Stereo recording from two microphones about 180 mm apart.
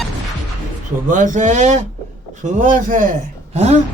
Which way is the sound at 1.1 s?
45° right (ahead or behind).